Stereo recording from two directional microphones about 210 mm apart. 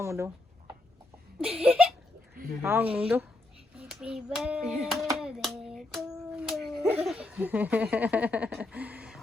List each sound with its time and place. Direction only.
0.0 s speech: 15° right (ahead or behind)
1.4 s a sound: 5° right (ahead or behind)
2.6 s speech: 10° right (ahead or behind)
3.8 s child singing: 5° right (ahead or behind)
5.1 s hands: centre (ahead or behind)
7.0 s speech: 5° right (ahead or behind)